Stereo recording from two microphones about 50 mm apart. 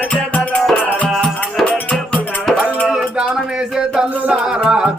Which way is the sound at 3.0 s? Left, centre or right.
Centre.